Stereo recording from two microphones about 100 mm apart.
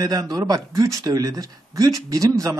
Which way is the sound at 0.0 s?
40° right (ahead or behind).